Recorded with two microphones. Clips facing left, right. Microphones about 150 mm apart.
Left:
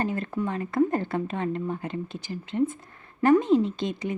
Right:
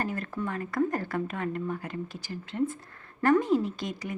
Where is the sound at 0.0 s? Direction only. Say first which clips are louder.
Left 4 dB; 20° left (ahead or behind).